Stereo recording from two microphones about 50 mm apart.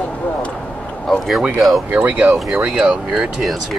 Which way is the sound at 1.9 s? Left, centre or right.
Right.